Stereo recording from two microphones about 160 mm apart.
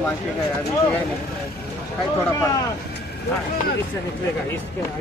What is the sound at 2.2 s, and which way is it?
Speech, 20° left (ahead or behind).